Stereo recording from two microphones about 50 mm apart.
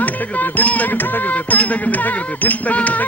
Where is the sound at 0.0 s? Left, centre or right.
Left.